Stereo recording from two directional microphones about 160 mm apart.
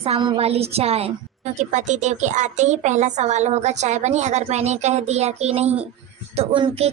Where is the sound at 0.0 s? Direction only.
35° right (ahead or behind).